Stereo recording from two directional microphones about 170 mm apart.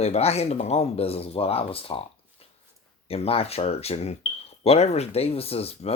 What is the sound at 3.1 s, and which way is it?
Speech, 35° left (ahead or behind).